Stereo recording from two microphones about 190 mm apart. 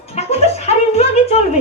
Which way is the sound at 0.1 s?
35° left (ahead or behind).